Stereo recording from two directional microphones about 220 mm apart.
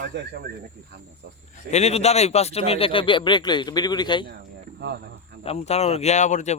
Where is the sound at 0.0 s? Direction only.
45° right (ahead or behind).